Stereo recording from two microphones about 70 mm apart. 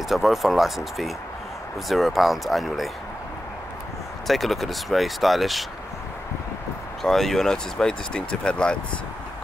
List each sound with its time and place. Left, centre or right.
0.1 s speech: centre
4.3 s speech: centre
7.0 s speech: centre